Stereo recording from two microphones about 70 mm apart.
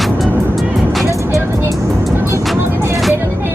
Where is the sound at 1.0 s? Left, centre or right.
Right.